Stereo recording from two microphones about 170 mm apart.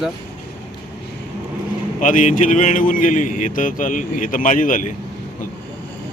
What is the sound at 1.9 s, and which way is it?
Speech, 50° left (ahead or behind).